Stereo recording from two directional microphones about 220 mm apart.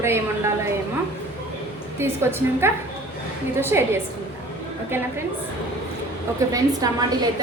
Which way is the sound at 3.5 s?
10° right (ahead or behind).